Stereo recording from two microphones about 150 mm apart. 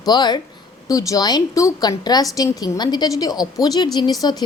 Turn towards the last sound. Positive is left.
turn(degrees=25)  # may be behind; listen again after turning